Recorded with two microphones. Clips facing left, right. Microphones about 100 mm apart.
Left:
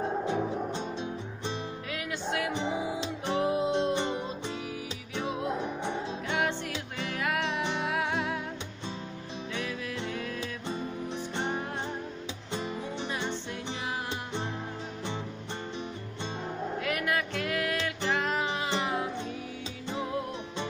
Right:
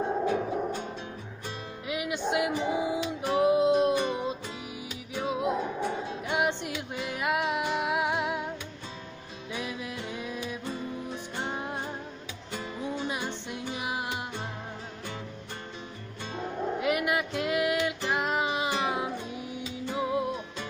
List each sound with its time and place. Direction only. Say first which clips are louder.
0.3 s music: right 2 dB; 25° left (ahead or behind)
1.9 s music: right 6 dB; 20° right (ahead or behind)
2.5 s music: right 3 dB; 25° left (ahead or behind)
3.3 s music: right 5 dB; 20° right (ahead or behind)
3.9 s music: right 2 dB; 25° left (ahead or behind)
5.1 s music: right 3 dB; 20° right (ahead or behind)
9.5 s music: right 1 dB; 15° right (ahead or behind)
11.1 s music: left 2 dB; 25° left (ahead or behind)
12.5 s music: right 1 dB; 20° left (ahead or behind)
16.8 s music: right 3 dB; 20° right (ahead or behind)